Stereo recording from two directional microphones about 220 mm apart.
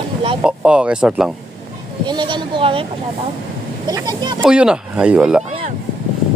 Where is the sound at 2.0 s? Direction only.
20° right (ahead or behind).